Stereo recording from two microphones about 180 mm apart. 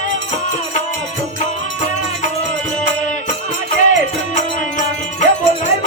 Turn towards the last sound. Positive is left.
turn(degrees=45)  # may be behind; listen again after turning